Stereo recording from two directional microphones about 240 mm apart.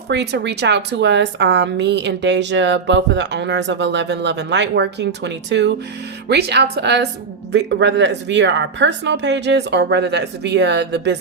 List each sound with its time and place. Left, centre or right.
0.1 s a woman's voice: right